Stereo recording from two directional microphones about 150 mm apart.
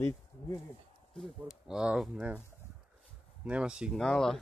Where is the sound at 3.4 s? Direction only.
5° right (ahead or behind).